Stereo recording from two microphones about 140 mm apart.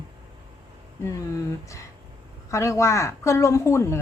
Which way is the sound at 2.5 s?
20° left (ahead or behind).